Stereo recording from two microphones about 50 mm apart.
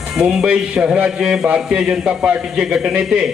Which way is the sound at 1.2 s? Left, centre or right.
Centre.